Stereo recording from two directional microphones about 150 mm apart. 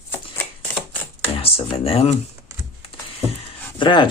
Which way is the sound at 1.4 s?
40° left (ahead or behind).